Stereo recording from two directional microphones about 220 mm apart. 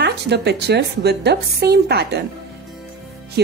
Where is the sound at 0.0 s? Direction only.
50° right (ahead or behind).